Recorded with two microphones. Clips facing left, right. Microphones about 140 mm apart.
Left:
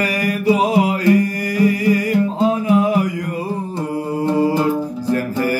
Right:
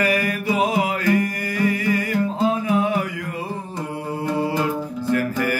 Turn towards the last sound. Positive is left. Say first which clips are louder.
# left 3 dB
turn(degrees=35)  # may be behind; listen again after turning